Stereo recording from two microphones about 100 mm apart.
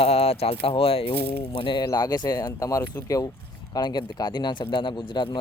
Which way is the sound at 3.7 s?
45° left (ahead or behind).